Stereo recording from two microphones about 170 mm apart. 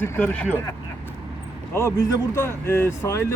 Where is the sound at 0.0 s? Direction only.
10° left (ahead or behind).